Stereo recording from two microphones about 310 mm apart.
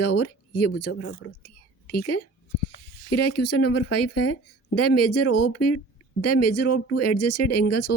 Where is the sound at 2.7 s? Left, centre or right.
Left.